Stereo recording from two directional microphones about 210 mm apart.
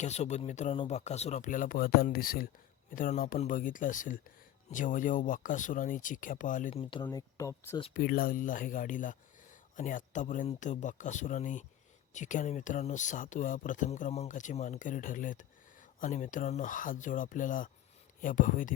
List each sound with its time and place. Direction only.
0.0 s speech: 35° left (ahead or behind)
7.0 s speech: 15° left (ahead or behind)
7.9 s speech: 45° left (ahead or behind)